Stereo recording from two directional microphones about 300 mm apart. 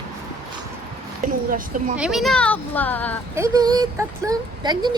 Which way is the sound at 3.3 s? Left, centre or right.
Centre.